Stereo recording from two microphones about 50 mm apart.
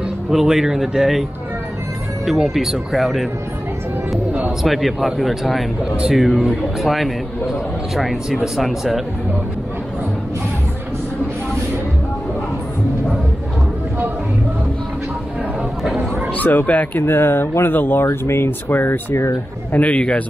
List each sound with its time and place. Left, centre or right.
0.3 s speech: centre
2.2 s speech: centre
4.6 s speech: centre
15.8 s a sound: centre
16.3 s speech: left
17.0 s speech: left
18.0 s speech: left
18.7 s speech: left
19.7 s a man's voice: left